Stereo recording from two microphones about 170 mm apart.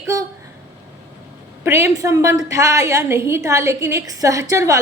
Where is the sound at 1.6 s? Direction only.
15° right (ahead or behind).